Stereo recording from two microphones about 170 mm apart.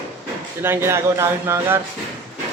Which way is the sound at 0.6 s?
15° right (ahead or behind).